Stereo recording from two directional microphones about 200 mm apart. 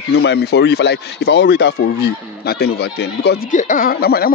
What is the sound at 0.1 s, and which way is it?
A man's voice, 55° left (ahead or behind).